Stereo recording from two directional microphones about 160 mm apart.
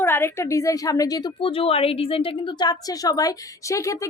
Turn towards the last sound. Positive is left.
turn(degrees=20)  # may be behind; listen again after turning